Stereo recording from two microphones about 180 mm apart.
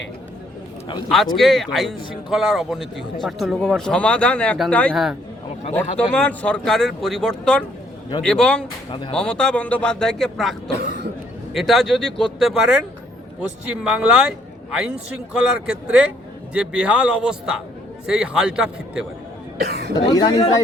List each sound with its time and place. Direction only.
1.4 s a man's voice: centre (ahead or behind)
8.9 s speech: 25° left (ahead or behind)
9.1 s a man's voice: 5° left (ahead or behind)
10.7 s speech: 65° right (ahead or behind)
11.5 s a man's voice: centre (ahead or behind)
13.8 s a man's voice: 5° right (ahead or behind)
19.6 s speech: 65° right (ahead or behind)
19.9 s speech: 25° left (ahead or behind)